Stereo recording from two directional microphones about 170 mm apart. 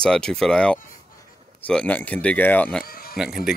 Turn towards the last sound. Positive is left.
turn(degrees=0)  # may be behind; listen again after turning